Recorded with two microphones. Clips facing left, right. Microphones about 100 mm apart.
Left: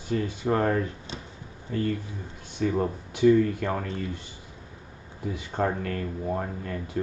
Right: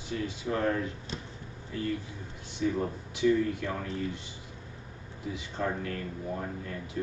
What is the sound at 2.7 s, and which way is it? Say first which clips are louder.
Speech: left 5 dB; 45° left (ahead or behind).